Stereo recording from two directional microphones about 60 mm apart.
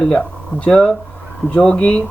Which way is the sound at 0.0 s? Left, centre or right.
Centre.